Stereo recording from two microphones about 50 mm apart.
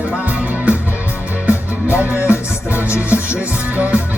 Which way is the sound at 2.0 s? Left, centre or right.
Right.